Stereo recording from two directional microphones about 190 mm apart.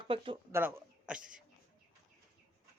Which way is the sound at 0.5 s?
10° right (ahead or behind).